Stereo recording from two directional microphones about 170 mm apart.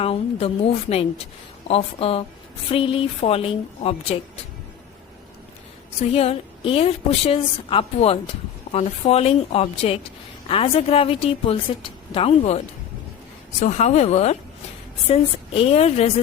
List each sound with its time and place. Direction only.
0.0 s a woman's voice: 35° left (ahead or behind)
6.1 s a woman's voice: 35° left (ahead or behind)